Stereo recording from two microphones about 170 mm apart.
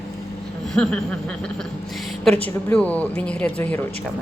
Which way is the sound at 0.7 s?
5° left (ahead or behind).